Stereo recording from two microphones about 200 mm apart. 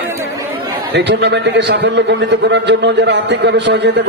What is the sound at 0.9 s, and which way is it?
A man's voice, 60° right (ahead or behind).